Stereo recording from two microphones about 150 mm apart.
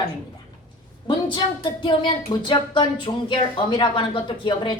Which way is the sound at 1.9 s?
35° left (ahead or behind).